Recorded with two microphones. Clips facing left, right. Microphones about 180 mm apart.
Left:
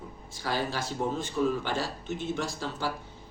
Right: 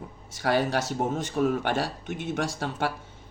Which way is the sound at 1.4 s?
65° right (ahead or behind).